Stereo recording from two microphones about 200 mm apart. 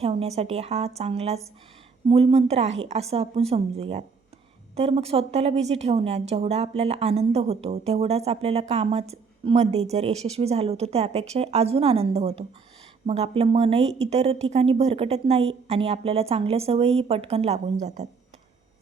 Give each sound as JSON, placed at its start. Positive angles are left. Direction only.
{"t": 0.0, "sound": "a woman's voice", "side_deg": -30}